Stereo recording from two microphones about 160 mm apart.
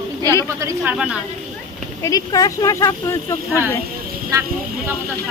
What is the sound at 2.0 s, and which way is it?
Speech, 20° left (ahead or behind).